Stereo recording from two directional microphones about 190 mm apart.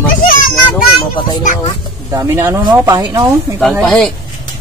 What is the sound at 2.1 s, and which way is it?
Speech, 15° right (ahead or behind).